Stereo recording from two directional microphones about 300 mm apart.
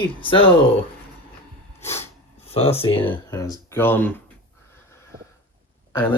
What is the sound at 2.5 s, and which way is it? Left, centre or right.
Speech, centre.